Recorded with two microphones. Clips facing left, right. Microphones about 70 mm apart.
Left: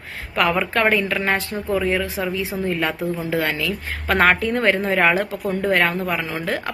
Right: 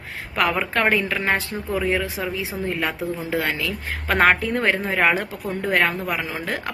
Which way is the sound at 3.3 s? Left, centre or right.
Right.